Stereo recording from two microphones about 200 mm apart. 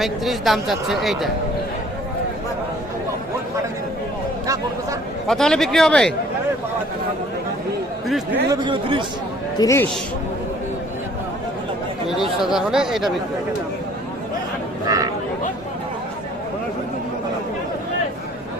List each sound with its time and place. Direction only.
0.0 s speech: centre (ahead or behind)
4.4 s speech: 15° right (ahead or behind)
5.3 s speech: centre (ahead or behind)
8.0 s speech: centre (ahead or behind)
8.4 s speech: 25° right (ahead or behind)
9.6 s a man's voice: 15° left (ahead or behind)
12.4 s speech: centre (ahead or behind)
14.8 s a sound: 20° right (ahead or behind)